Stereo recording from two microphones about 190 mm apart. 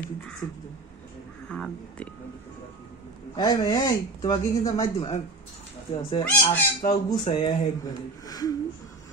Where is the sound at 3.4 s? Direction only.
20° left (ahead or behind).